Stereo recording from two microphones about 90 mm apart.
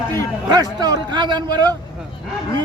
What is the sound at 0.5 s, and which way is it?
A man's voice, 45° right (ahead or behind).